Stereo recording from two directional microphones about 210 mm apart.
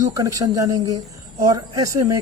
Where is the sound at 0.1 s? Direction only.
15° right (ahead or behind).